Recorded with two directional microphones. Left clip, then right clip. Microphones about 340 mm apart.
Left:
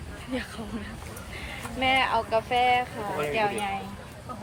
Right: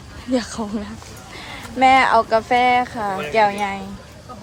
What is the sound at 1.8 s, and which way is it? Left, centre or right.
A woman's voice, right.